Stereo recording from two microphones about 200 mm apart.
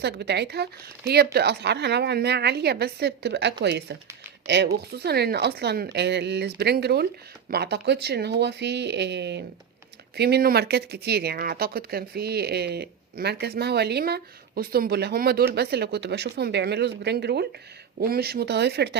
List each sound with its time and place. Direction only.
0.0 s speech: 55° right (ahead or behind)